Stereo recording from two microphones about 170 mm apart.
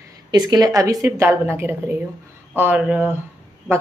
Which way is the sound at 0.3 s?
25° right (ahead or behind).